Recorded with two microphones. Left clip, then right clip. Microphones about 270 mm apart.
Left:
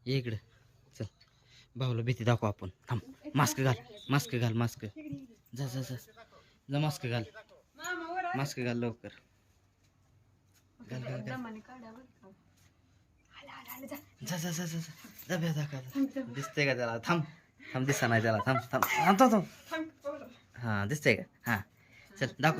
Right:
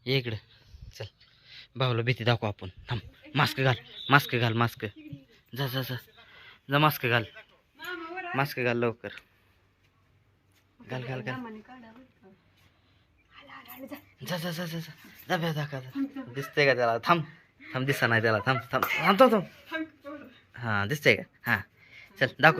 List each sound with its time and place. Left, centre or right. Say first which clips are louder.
0.0 s speech: right 7 dB; centre
10.8 s speech: right 6 dB; centre
14.3 s speech: right 5 dB; centre
20.5 s speech: right 6 dB; centre